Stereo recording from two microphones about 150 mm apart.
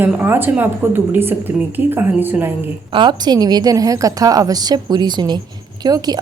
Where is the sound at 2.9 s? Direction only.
30° right (ahead or behind).